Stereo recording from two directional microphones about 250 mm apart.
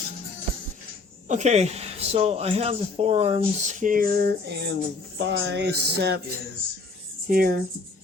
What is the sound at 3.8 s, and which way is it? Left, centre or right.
Speech, right.